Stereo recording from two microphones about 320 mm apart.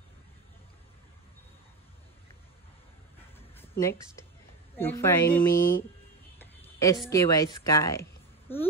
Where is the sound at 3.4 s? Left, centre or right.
Centre.